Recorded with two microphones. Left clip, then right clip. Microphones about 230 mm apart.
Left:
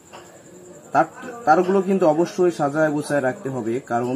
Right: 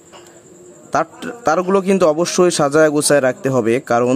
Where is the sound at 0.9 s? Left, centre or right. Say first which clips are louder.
Right 1 dB; right.